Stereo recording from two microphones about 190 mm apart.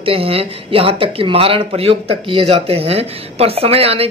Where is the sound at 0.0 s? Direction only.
30° right (ahead or behind).